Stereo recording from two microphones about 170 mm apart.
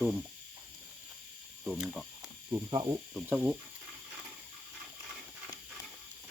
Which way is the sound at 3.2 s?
5° right (ahead or behind).